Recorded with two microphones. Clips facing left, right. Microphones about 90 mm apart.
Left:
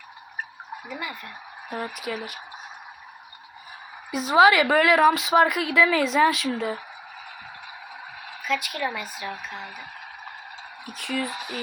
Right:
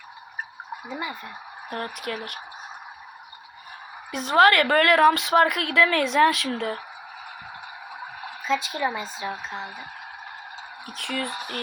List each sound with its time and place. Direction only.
0.9 s speech: 25° right (ahead or behind)
1.7 s a woman's voice: 5° left (ahead or behind)
4.1 s a woman's voice: 5° left (ahead or behind)
8.4 s speech: 25° right (ahead or behind)
10.8 s a woman's voice: centre (ahead or behind)